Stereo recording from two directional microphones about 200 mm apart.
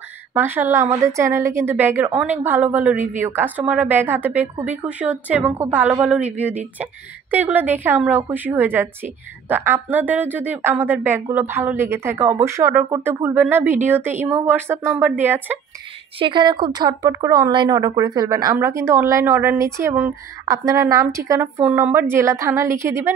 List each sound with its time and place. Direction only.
0.3 s speech: 10° right (ahead or behind)
16.2 s speech: 25° right (ahead or behind)